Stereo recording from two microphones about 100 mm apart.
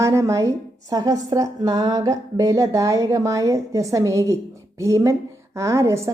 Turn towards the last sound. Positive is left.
turn(degrees=-30)  # may be behind; listen again after turning